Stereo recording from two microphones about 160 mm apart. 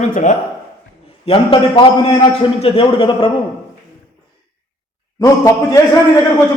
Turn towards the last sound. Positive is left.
turn(degrees=20)  # may be behind; listen again after turning